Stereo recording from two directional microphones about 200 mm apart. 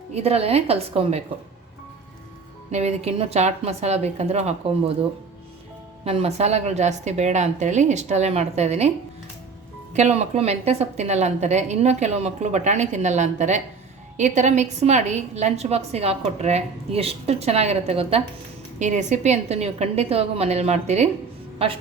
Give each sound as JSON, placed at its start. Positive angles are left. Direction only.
{"t": 0.1, "sound": "a woman's voice", "side_deg": -30}
{"t": 2.7, "sound": "a woman's voice", "side_deg": -30}
{"t": 6.1, "sound": "a woman's voice", "side_deg": -30}
{"t": 9.9, "sound": "a woman's voice", "side_deg": -35}